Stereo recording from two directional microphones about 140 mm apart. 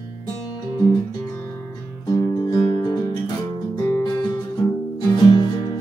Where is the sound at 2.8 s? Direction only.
30° left (ahead or behind).